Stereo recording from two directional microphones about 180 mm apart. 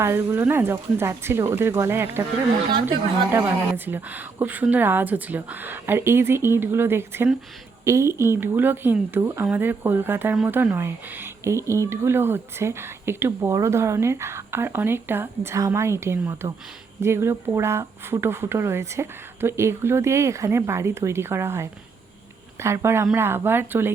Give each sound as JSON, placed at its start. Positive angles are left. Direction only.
{"t": 0.0, "sound": "speech", "side_deg": -15}